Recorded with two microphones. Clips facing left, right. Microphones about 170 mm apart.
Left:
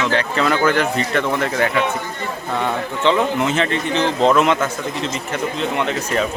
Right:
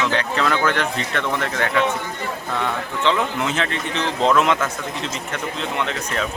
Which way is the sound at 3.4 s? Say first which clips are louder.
Left 4 dB; centre (ahead or behind).